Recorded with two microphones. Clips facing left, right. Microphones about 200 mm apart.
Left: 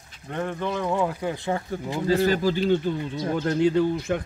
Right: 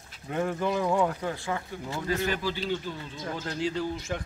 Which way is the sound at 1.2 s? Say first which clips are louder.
Left 4 dB; 20° left (ahead or behind).